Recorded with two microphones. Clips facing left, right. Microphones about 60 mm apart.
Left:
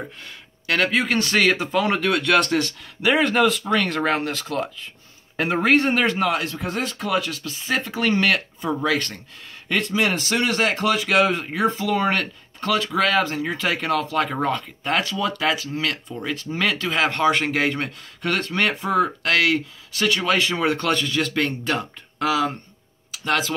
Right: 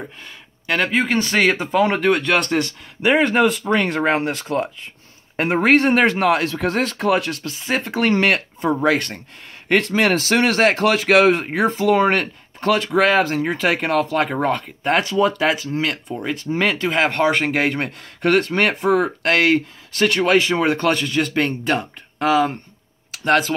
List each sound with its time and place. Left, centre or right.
0.7 s speech: centre; by 6.2 s right
6.2 s speech: right
7.1 s speech: right
9.7 s speech: right
14.8 s speech: right
15.3 s speech: centre
16.1 s speech: right